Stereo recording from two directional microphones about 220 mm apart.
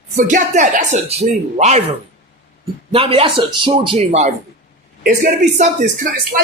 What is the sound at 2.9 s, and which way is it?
A man's voice, 25° right (ahead or behind).